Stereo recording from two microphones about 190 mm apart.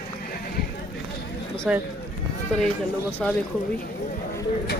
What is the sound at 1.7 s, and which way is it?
Speech, 5° right (ahead or behind).